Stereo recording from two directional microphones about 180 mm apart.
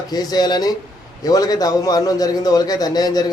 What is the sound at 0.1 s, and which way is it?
A man's voice, 20° left (ahead or behind).